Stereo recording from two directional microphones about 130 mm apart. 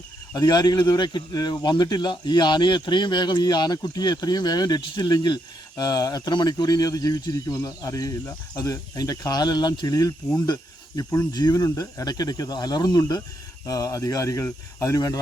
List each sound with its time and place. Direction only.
0.3 s speech: 30° left (ahead or behind)